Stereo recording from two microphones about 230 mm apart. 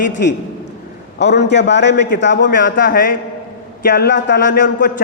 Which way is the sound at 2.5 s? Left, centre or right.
Left.